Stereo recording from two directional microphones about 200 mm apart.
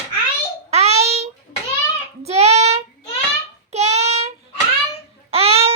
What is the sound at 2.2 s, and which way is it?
Child singing, 30° right (ahead or behind).